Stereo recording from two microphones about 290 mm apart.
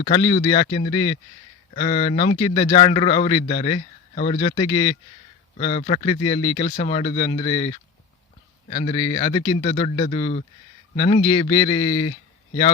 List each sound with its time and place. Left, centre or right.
0.0 s a man's voice: centre